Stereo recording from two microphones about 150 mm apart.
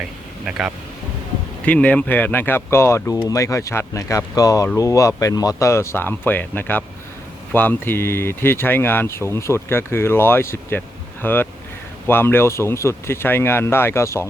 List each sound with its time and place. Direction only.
0.4 s speech: 5° right (ahead or behind)
1.6 s speech: 10° left (ahead or behind)